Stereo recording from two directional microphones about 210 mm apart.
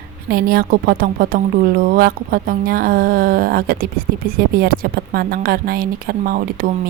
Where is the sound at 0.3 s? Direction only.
45° right (ahead or behind).